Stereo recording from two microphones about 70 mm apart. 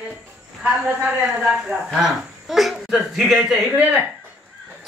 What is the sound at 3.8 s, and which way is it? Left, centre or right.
Speech, centre.